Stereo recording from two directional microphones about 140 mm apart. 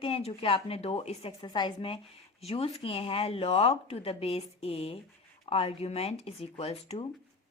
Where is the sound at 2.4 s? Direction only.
45° left (ahead or behind).